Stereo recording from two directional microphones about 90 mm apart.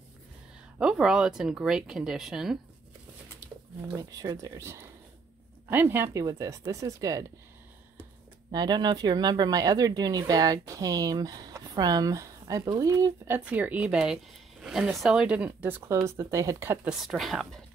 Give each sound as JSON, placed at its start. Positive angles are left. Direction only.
{"t": 0.7, "sound": "speech", "side_deg": -5}
{"t": 3.9, "sound": "speech", "side_deg": -40}
{"t": 6.1, "sound": "speech", "side_deg": -40}
{"t": 8.5, "sound": "speech", "side_deg": -55}
{"t": 13.3, "sound": "a woman's voice", "side_deg": -15}
{"t": 16.1, "sound": "speech", "side_deg": -35}
{"t": 16.8, "sound": "speech", "side_deg": -5}